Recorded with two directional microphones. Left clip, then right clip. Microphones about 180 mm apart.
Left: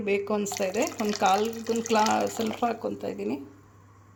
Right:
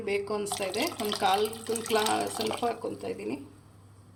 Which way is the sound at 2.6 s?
45° left (ahead or behind).